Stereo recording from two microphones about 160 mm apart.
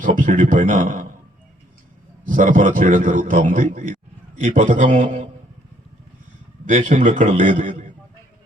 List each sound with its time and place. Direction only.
0.0 s speech: 55° right (ahead or behind)
2.3 s a man's voice: 55° right (ahead or behind)
6.7 s a man's voice: 50° right (ahead or behind)